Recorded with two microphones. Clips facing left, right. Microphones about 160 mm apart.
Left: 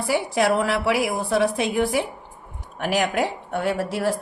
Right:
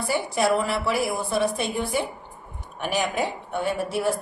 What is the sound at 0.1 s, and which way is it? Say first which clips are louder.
A woman's voice: left 2 dB; 90° left.